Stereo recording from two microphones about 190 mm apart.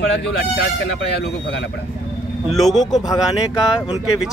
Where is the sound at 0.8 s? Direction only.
70° left (ahead or behind).